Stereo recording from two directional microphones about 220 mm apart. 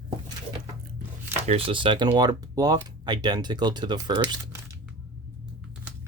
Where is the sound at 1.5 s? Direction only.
25° right (ahead or behind).